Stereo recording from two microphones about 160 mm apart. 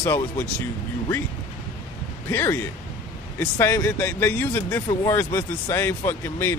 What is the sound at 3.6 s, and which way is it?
Speech, 15° left (ahead or behind).